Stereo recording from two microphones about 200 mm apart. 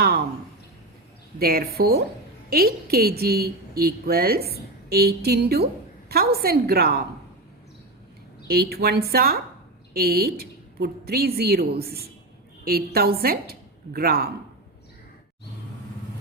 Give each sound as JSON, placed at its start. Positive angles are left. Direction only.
{"t": 1.4, "sound": "a woman's voice", "side_deg": -50}
{"t": 8.4, "sound": "a woman's voice", "side_deg": -50}